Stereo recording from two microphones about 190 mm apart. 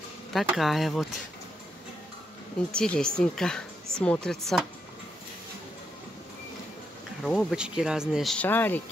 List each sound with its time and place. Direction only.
0.3 s speech: centre (ahead or behind)
2.7 s speech: 5° left (ahead or behind)
7.2 s speech: 5° right (ahead or behind)